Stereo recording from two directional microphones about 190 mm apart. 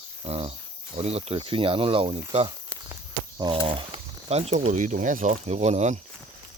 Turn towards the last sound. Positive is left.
turn(degrees=-35)  # may be behind; listen again after turning